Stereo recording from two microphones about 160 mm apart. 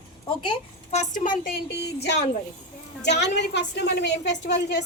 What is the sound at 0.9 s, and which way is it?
Speech, 55° left (ahead or behind).